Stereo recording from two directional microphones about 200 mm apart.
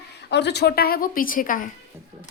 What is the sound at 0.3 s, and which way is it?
A woman's voice, 60° left (ahead or behind).